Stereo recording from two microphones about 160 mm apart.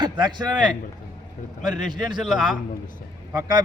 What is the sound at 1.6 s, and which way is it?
Speech, 30° right (ahead or behind).